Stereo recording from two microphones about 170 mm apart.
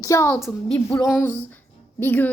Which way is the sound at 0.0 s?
20° left (ahead or behind).